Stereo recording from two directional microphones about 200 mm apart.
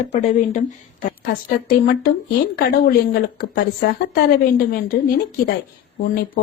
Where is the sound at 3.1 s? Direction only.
50° left (ahead or behind).